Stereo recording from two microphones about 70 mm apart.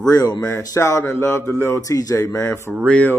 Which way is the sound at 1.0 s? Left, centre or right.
Left.